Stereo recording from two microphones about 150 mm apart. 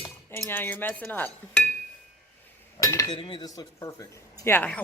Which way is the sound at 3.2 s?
30° left (ahead or behind).